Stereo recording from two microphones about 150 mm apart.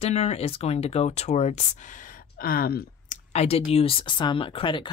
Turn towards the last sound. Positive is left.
turn(degrees=35)  # may be behind; listen again after turning